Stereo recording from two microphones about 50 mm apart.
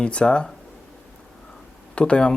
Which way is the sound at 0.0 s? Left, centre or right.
Left.